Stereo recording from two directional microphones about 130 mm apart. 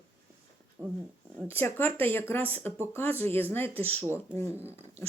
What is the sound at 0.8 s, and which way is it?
Speech, 15° right (ahead or behind).